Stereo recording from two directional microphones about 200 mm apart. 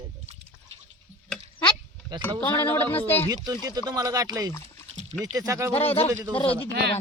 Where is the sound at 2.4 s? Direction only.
10° left (ahead or behind).